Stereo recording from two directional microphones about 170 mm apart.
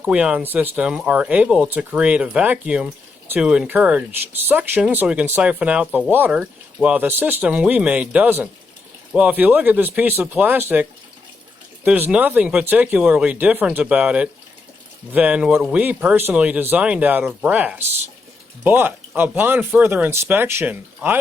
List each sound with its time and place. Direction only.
0.0 s speech: 5° right (ahead or behind)
11.9 s speech: 10° right (ahead or behind)